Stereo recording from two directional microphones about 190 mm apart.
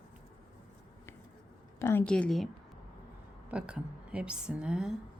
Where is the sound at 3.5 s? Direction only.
5° right (ahead or behind).